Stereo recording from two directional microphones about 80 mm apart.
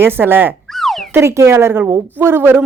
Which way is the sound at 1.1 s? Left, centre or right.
Right.